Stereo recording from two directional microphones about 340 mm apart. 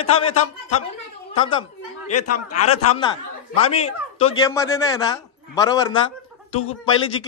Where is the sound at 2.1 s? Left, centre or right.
Left.